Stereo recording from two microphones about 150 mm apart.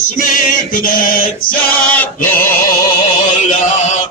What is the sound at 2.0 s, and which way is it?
Chant, 15° left (ahead or behind).